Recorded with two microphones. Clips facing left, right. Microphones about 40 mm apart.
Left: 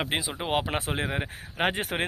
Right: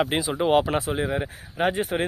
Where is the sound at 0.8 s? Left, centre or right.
Left.